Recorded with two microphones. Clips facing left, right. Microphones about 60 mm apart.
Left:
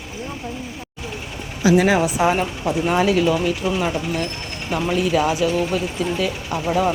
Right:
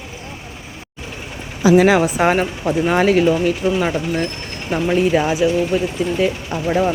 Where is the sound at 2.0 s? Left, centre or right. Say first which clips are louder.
Right 2 dB; right.